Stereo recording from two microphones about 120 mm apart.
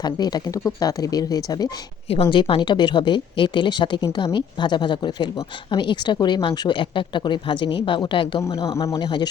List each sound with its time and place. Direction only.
0.0 s speech: 35° left (ahead or behind)
2.2 s speech: 45° left (ahead or behind)
8.4 s speech: 25° left (ahead or behind)
9.0 s speech: 40° left (ahead or behind)